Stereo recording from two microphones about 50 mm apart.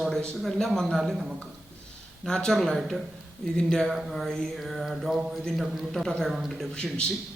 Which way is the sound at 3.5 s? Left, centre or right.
Centre.